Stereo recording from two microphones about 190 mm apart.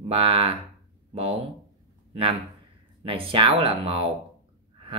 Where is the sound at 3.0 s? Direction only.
30° right (ahead or behind).